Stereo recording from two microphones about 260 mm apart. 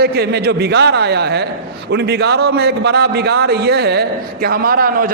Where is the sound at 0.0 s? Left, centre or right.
Right.